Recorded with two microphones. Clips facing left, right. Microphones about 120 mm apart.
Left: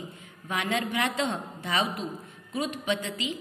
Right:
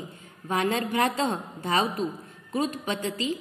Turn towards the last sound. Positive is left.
turn(degrees=-35)  # may be behind; listen again after turning